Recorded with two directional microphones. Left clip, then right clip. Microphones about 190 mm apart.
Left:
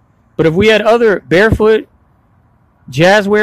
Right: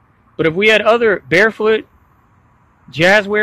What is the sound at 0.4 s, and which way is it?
A man's voice, 25° left (ahead or behind).